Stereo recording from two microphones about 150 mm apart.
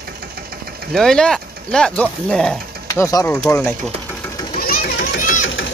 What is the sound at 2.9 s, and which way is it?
Speech, 20° left (ahead or behind).